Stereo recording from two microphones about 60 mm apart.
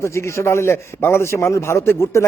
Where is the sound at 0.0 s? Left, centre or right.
Left.